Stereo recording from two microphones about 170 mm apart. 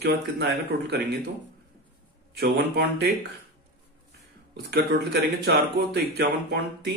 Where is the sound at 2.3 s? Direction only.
70° right (ahead or behind).